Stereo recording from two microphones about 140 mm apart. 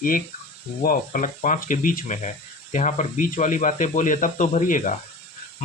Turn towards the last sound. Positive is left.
turn(degrees=65)  # may be behind; listen again after turning